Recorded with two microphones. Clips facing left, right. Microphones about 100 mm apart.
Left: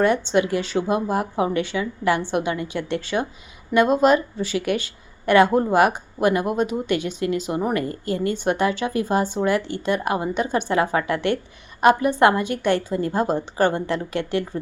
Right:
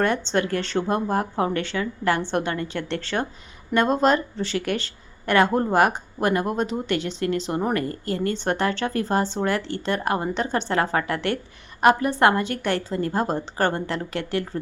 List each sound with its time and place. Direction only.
0.0 s a woman's voice: 15° left (ahead or behind)